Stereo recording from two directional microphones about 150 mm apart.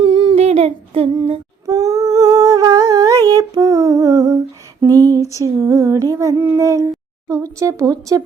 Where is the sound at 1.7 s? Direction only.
20° right (ahead or behind).